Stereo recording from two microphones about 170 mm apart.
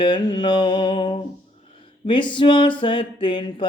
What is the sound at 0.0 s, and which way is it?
Mantra, 25° left (ahead or behind).